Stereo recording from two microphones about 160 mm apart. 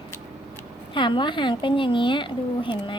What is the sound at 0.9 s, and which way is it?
A woman's voice, 30° left (ahead or behind).